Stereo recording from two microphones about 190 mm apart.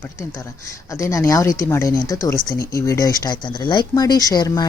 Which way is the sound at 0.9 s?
15° left (ahead or behind).